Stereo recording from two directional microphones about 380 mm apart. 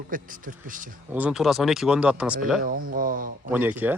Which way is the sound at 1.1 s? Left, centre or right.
Centre.